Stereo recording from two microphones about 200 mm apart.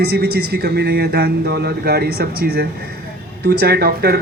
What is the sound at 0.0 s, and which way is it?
A woman's voice, 55° right (ahead or behind).